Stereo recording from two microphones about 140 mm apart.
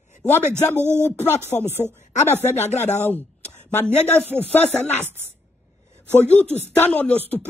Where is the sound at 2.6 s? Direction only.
55° left (ahead or behind).